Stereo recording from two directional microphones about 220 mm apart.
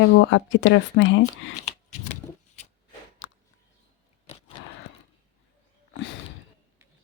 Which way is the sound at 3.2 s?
55° left (ahead or behind).